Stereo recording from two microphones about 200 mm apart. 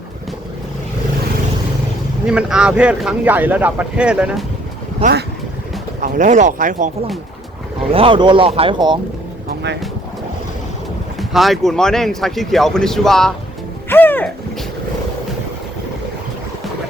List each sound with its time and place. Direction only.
2.2 s speech: 5° right (ahead or behind)
5.0 s speech: 30° right (ahead or behind)
7.8 s speech: 25° right (ahead or behind)
11.2 s speech: centre (ahead or behind)
13.9 s music: 10° left (ahead or behind)